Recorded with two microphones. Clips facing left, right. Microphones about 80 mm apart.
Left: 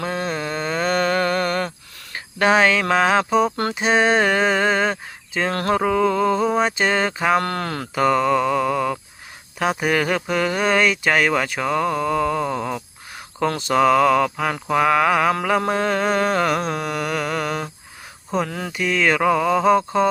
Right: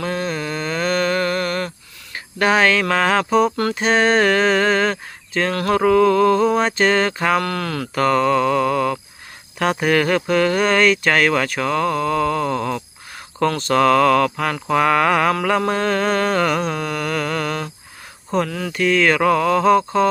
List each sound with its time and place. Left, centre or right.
0.0 s a sound: left
2.1 s speech: left
5.5 s mantra: left
5.7 s speech: centre
7.3 s speech: left
7.9 s speech: centre
14.7 s mantra: centre
15.4 s speech: centre
18.4 s mantra: left
18.7 s speech: centre